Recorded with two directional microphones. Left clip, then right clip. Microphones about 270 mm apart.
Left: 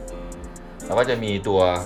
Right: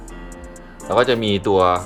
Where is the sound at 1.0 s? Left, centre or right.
Right.